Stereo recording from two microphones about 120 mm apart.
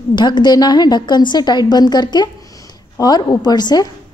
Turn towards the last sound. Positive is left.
turn(degrees=35)  # may be behind; listen again after turning